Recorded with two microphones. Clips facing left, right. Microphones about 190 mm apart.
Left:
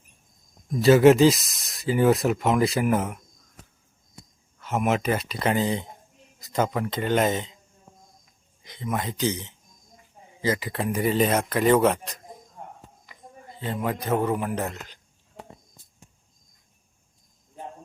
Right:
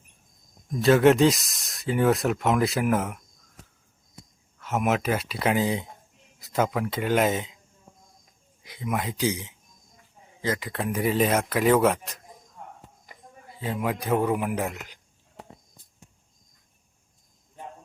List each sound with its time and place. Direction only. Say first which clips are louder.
0.8 s speech: left 3 dB; 5° left (ahead or behind)
4.6 s speech: left 1 dB; centre (ahead or behind)
8.6 s a man's voice: even; 5° right (ahead or behind)
10.4 s speech: left 2 dB; centre (ahead or behind)
13.5 s a man's voice: even; 5° right (ahead or behind)